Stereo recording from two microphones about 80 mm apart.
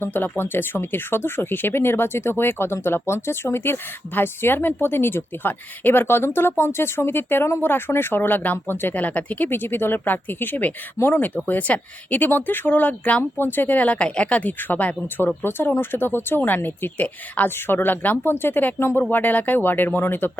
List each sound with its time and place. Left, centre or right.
0.0 s speech: left